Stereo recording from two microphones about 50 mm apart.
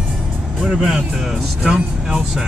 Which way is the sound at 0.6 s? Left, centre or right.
Centre.